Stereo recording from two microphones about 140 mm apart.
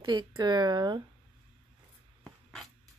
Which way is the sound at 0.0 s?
35° right (ahead or behind).